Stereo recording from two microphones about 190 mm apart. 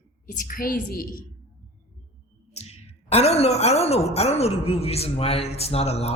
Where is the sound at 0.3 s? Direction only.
50° left (ahead or behind).